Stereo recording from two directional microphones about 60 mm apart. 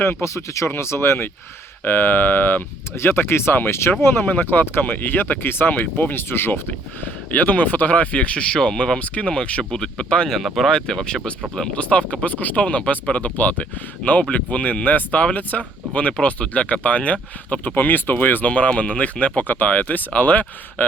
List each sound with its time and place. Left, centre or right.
0.0 s speech: left
1.8 s speech: left
4.0 s speech: left; by 10.3 s centre
10.3 s speech: centre
10.7 s speech: centre